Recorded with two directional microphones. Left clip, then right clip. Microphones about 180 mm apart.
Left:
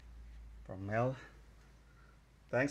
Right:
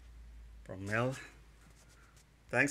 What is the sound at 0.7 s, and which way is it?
Speech, 20° right (ahead or behind).